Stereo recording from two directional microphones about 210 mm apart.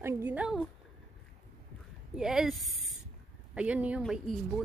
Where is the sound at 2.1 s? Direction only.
Centre (ahead or behind).